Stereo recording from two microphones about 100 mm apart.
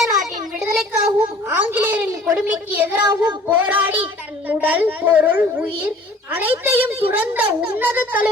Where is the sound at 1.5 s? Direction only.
20° right (ahead or behind).